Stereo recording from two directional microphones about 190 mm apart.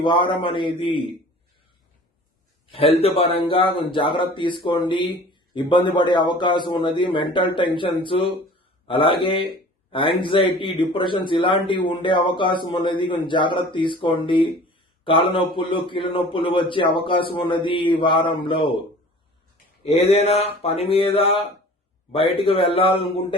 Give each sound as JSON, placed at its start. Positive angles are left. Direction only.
{"t": 0.0, "sound": "speech", "side_deg": 25}
{"t": 2.7, "sound": "speech", "side_deg": 30}
{"t": 19.8, "sound": "a sound", "side_deg": 30}
{"t": 22.1, "sound": "speech", "side_deg": 30}